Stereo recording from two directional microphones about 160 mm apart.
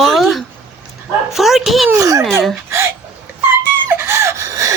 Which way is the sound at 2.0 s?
20° right (ahead or behind).